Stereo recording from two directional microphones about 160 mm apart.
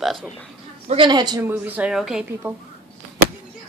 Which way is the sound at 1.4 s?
10° right (ahead or behind).